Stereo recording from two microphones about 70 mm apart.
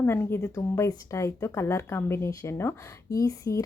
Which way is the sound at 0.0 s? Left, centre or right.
Left.